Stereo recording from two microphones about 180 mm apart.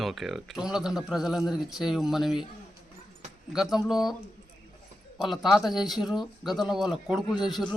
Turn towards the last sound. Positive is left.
turn(degrees=0)  # may be behind; listen again after turning